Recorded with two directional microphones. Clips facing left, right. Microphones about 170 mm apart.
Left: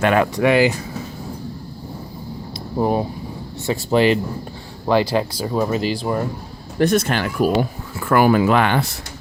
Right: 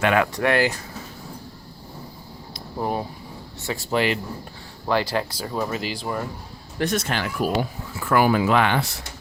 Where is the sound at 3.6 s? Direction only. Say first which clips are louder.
Left 7 dB; 25° left (ahead or behind).